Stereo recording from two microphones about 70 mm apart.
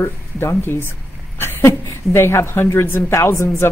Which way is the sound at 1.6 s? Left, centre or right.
Left.